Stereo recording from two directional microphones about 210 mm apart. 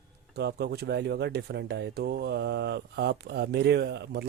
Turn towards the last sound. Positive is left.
turn(degrees=-50)  # may be behind; listen again after turning